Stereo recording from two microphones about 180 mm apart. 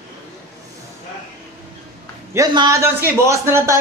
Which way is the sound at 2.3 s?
20° right (ahead or behind).